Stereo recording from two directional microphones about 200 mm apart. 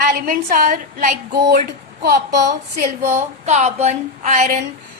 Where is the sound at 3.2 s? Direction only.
35° right (ahead or behind).